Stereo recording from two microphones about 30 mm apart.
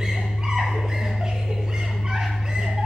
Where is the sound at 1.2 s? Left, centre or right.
Centre.